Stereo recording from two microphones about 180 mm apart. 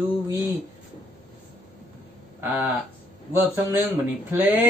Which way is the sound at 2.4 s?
10° right (ahead or behind).